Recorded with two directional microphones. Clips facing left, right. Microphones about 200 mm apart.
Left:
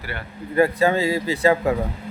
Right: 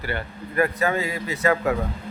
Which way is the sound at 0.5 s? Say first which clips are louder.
Left 4 dB; 30° left (ahead or behind).